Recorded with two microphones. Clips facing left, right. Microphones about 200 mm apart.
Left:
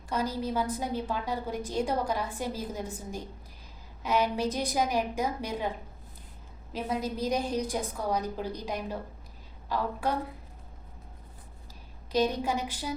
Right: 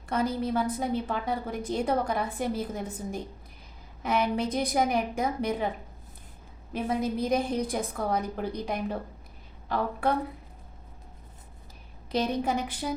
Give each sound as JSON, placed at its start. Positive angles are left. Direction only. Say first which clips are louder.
{"t": 0.1, "sound": "a woman's voice", "louder": "right 3 dB", "side_deg": -55}
{"t": 4.4, "sound": "a woman's voice", "louder": "right 2 dB", "side_deg": -55}
{"t": 7.0, "sound": "a woman's voice", "louder": "right 4 dB", "side_deg": -55}
{"t": 12.1, "sound": "a woman's voice", "louder": "even", "side_deg": -55}